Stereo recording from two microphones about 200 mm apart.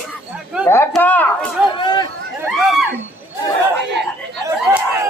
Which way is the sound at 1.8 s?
20° left (ahead or behind).